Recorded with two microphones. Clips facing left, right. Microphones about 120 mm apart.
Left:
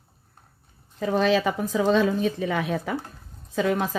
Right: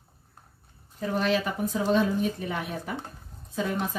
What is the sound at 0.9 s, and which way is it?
A woman's voice, 90° left.